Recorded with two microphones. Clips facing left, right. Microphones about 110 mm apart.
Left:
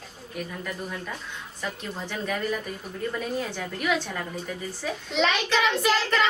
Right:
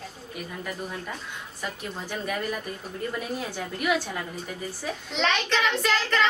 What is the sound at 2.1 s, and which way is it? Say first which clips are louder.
A woman's voice: left 1 dB; 10° right (ahead or behind).